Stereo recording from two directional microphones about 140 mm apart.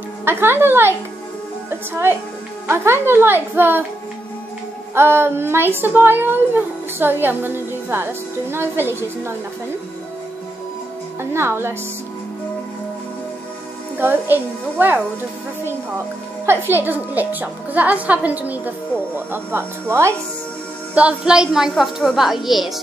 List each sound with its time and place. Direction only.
0.2 s a woman's voice: 15° right (ahead or behind)
4.9 s a woman's voice: 15° right (ahead or behind)
11.3 s a woman's voice: 15° right (ahead or behind)
13.9 s a woman's voice: 15° right (ahead or behind)
16.4 s a woman's voice: 15° right (ahead or behind)
20.9 s speech: 5° right (ahead or behind)